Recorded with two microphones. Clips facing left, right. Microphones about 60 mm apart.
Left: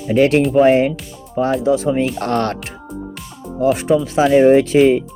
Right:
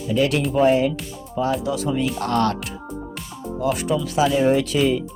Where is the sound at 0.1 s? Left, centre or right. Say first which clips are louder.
Left 7 dB; left.